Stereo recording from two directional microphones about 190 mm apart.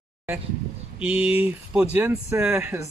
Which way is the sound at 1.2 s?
30° left (ahead or behind).